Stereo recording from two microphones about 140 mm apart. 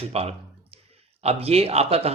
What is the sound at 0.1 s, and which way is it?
Speech, 45° right (ahead or behind).